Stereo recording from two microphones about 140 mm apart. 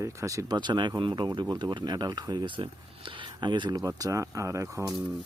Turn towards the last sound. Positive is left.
turn(degrees=-20)  # may be behind; listen again after turning